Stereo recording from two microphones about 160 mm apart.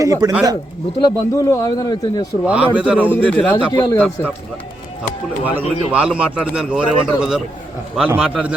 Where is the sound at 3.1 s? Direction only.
10° left (ahead or behind).